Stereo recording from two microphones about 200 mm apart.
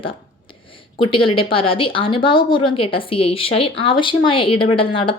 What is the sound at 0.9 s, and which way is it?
Speech, 25° left (ahead or behind).